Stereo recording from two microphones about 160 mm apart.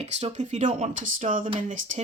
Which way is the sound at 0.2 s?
45° right (ahead or behind).